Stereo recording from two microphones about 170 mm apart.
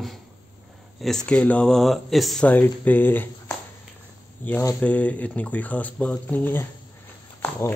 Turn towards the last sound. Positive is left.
turn(degrees=15)  # may be behind; listen again after turning